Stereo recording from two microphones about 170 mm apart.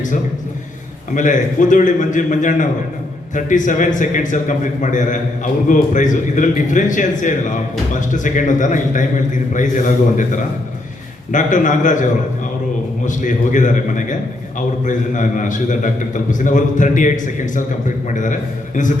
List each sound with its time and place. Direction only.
1.1 s a man's voice: 50° left (ahead or behind)
13.1 s a man's voice: 50° left (ahead or behind)